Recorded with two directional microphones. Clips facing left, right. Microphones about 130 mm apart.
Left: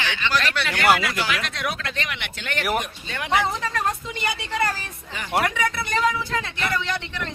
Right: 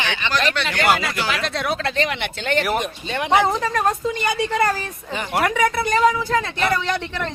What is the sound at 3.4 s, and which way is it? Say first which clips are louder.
Speech: right 5 dB; 45° right (ahead or behind).